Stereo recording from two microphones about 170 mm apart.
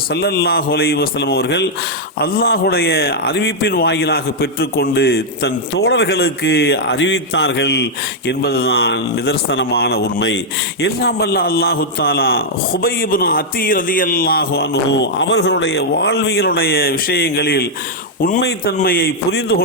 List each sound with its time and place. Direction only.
0.1 s speech: 75° left (ahead or behind)
2.2 s speech: 65° left (ahead or behind); by 7.9 s 85° left
8.3 s a man's voice: 70° left (ahead or behind)